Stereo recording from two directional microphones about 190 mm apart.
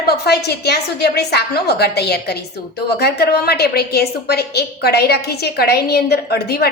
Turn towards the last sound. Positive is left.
turn(degrees=55)  # may be behind; listen again after turning